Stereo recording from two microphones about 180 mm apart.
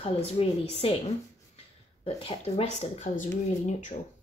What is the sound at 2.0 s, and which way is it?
Speech, 35° left (ahead or behind).